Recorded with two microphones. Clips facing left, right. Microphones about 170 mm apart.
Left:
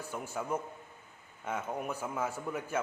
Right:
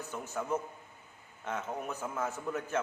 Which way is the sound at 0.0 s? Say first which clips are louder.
Even; 10° left (ahead or behind).